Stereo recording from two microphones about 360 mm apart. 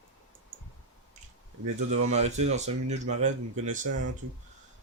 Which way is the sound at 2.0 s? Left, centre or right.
Centre.